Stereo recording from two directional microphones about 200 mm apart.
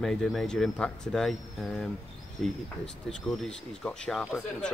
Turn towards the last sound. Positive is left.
turn(degrees=5)  # may be behind; listen again after turning